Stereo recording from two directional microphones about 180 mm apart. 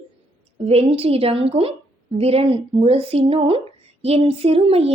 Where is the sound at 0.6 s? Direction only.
35° right (ahead or behind).